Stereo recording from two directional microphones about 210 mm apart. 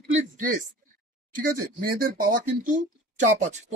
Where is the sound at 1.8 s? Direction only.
45° right (ahead or behind).